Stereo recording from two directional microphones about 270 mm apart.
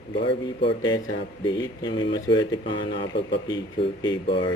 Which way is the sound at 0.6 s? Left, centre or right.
Centre.